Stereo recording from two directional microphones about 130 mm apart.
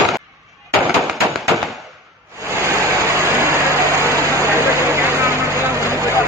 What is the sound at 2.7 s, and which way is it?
Vehicle, 20° right (ahead or behind).